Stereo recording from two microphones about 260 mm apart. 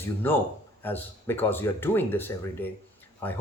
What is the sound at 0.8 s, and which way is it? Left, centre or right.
A man's voice, centre.